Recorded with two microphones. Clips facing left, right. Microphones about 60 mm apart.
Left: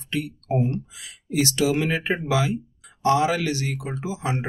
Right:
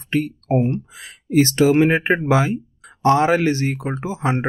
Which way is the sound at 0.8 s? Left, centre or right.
Right.